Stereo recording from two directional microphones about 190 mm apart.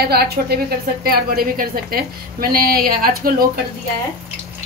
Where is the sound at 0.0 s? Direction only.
55° right (ahead or behind).